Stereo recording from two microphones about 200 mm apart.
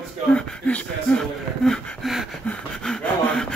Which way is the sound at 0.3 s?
5° left (ahead or behind).